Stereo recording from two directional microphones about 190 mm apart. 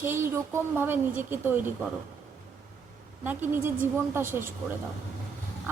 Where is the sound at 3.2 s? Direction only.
10° right (ahead or behind).